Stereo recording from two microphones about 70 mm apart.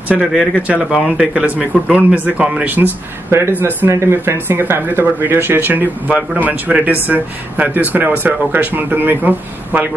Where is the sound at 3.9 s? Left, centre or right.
Right.